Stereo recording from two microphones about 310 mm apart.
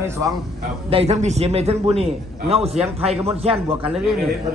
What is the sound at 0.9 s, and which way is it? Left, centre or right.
A man's voice, centre.